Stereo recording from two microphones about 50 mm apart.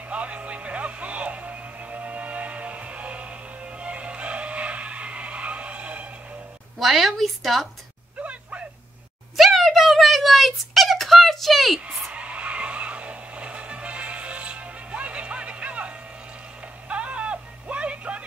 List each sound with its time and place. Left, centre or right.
0.1 s music: right
6.8 s a woman's voice: centre
8.2 s a sound: right
9.4 s a sound: centre
12.1 s vehicle: right
16.9 s music: right